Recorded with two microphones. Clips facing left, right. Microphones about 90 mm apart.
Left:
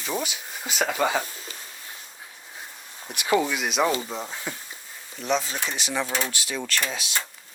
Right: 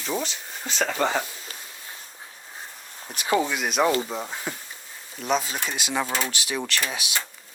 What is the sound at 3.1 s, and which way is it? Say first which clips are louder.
Speech: left 1 dB; 30° right (ahead or behind).